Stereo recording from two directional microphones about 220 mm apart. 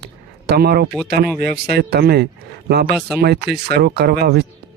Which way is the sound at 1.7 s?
45° right (ahead or behind).